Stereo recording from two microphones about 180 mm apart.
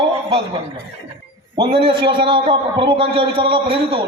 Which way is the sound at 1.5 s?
30° right (ahead or behind).